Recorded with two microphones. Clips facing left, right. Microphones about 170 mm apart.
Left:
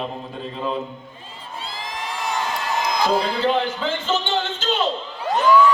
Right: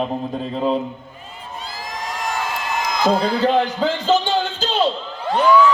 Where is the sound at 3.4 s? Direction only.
40° right (ahead or behind).